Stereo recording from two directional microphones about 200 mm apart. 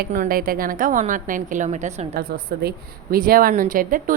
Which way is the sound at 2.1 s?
50° right (ahead or behind).